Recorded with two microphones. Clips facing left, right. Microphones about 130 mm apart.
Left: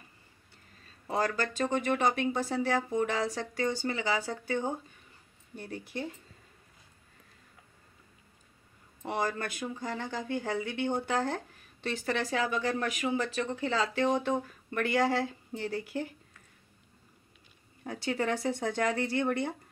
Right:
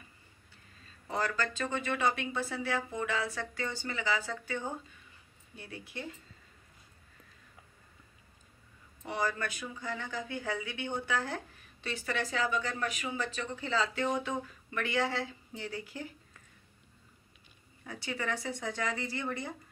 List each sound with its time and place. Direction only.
1.0 s speech: 35° left (ahead or behind)
5.6 s speech: 40° left (ahead or behind)
9.1 s speech: 40° left (ahead or behind)
17.8 s speech: 50° left (ahead or behind)